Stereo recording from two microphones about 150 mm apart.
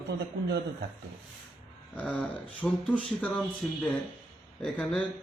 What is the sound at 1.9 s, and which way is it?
A man's voice, 10° left (ahead or behind).